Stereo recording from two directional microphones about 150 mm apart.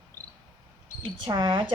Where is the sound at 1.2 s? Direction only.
30° right (ahead or behind).